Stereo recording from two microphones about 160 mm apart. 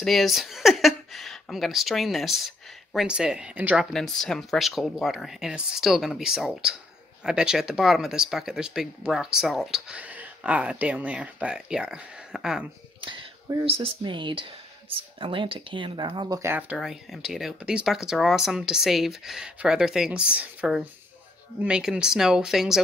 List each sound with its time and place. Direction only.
0.0 s speech: centre (ahead or behind)
13.0 s a sound: 30° right (ahead or behind)
13.7 s speech: 35° right (ahead or behind); by 16.7 s 15° right (ahead or behind)
16.7 s speech: centre (ahead or behind)